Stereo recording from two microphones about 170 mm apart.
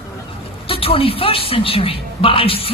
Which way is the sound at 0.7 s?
35° left (ahead or behind).